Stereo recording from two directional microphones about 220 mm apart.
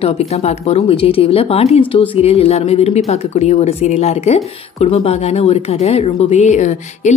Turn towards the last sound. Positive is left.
turn(degrees=35)  # may be behind; listen again after turning